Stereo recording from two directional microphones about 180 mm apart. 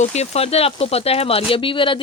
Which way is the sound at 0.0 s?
35° left (ahead or behind).